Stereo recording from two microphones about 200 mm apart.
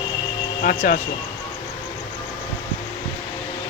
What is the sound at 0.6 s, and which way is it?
Speech, 40° left (ahead or behind).